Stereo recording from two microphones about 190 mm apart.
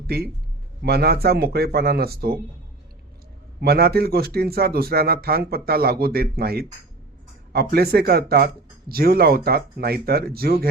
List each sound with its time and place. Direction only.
0.8 s speech: 55° right (ahead or behind)
3.6 s speech: 55° right (ahead or behind)